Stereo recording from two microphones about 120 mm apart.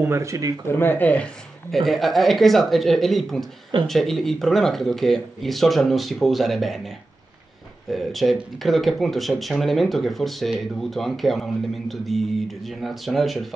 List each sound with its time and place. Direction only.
0.0 s speech: 25° right (ahead or behind)
0.7 s speech: 15° left (ahead or behind); by 6.8 s centre (ahead or behind)
7.9 s speech: centre (ahead or behind)